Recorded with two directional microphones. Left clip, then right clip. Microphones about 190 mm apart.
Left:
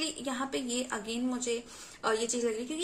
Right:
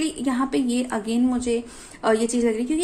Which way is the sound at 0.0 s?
45° right (ahead or behind).